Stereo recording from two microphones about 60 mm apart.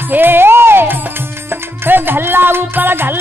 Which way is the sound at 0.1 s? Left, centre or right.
Right.